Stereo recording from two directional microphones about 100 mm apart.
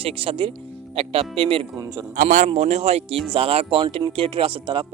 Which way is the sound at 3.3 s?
70° right (ahead or behind).